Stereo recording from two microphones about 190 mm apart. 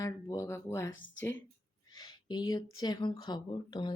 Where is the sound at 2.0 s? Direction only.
20° left (ahead or behind).